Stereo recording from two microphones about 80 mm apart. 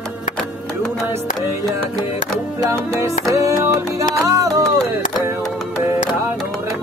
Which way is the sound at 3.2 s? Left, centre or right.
Right.